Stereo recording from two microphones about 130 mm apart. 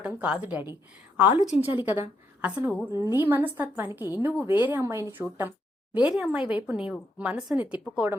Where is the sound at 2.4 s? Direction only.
10° right (ahead or behind).